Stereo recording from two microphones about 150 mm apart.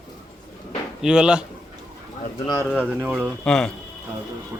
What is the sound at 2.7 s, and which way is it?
Speech, 10° right (ahead or behind).